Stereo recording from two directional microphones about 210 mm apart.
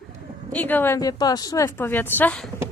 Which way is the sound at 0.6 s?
10° left (ahead or behind).